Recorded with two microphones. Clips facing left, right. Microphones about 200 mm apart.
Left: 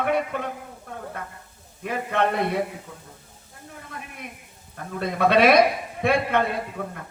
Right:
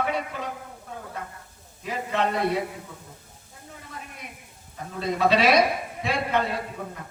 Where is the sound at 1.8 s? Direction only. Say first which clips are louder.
Left 3 dB; 55° left (ahead or behind).